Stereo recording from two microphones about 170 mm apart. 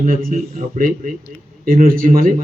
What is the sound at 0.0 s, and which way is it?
A man's voice, 55° right (ahead or behind).